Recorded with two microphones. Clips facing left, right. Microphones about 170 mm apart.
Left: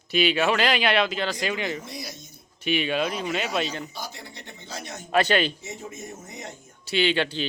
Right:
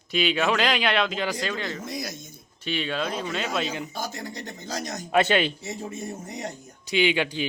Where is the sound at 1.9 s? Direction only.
45° right (ahead or behind).